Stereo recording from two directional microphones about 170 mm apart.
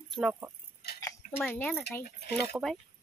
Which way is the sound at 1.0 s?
10° left (ahead or behind).